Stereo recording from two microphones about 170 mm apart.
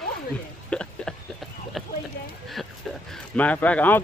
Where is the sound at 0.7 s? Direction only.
5° left (ahead or behind).